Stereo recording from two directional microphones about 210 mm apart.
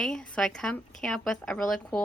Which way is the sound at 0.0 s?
5° left (ahead or behind).